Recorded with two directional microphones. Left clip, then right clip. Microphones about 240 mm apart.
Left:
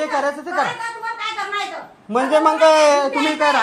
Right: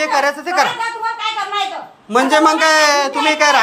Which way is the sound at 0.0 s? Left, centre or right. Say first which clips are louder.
Right 5 dB; left.